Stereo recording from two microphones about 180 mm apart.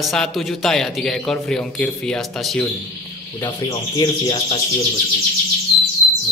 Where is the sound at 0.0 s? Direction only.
Centre (ahead or behind).